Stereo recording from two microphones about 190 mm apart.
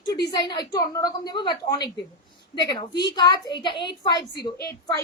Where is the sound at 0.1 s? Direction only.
20° left (ahead or behind).